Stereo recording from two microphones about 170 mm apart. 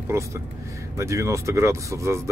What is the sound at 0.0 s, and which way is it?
Speech, 15° right (ahead or behind).